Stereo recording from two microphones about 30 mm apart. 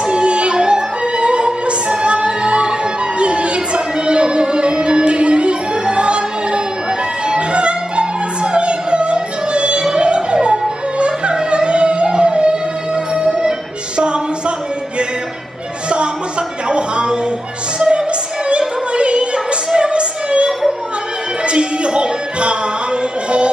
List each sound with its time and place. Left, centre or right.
0.0 s music: right
16.6 s a sound: right
17.7 s music: right
18.5 s opera: right
21.5 s music: right